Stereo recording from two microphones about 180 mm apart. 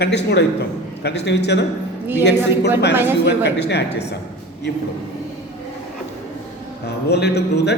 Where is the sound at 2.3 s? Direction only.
10° right (ahead or behind).